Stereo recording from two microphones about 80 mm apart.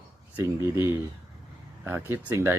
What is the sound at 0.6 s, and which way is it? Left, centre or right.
Speech, right.